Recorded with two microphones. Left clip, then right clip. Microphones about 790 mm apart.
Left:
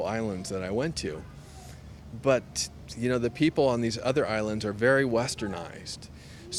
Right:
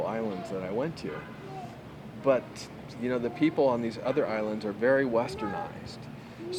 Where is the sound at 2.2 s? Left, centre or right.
Left.